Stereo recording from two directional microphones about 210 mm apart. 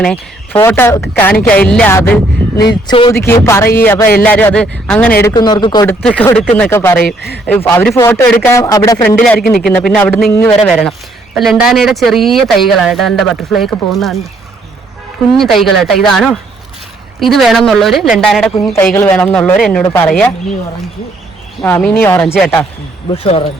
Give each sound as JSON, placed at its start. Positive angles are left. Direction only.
{"t": 0.0, "sound": "speech", "side_deg": 5}
{"t": 2.9, "sound": "speech", "side_deg": 25}
{"t": 3.2, "sound": "speech", "side_deg": 10}
{"t": 5.2, "sound": "speech", "side_deg": 20}
{"t": 6.0, "sound": "speech", "side_deg": 5}
{"t": 9.6, "sound": "speech", "side_deg": 5}
{"t": 15.3, "sound": "speech", "side_deg": 0}
{"t": 21.6, "sound": "speech", "side_deg": 10}
{"t": 23.0, "sound": "speech", "side_deg": 25}